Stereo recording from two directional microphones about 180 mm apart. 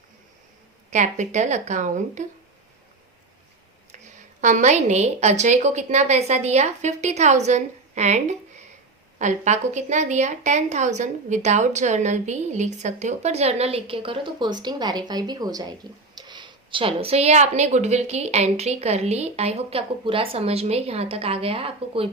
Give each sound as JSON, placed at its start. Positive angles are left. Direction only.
{"t": 0.9, "sound": "a woman's voice", "side_deg": -40}
{"t": 3.9, "sound": "a woman's voice", "side_deg": -40}